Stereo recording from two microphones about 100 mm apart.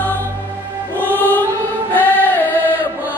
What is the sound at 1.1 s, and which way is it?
Music, 15° left (ahead or behind).